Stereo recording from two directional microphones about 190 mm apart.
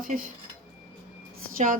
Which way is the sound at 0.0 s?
45° right (ahead or behind).